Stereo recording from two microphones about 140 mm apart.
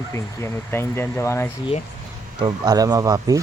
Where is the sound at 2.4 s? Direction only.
30° right (ahead or behind).